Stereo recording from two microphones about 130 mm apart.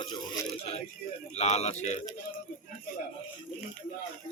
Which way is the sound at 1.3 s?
55° left (ahead or behind).